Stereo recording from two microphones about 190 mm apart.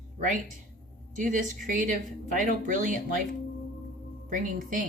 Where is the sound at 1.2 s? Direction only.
45° right (ahead or behind).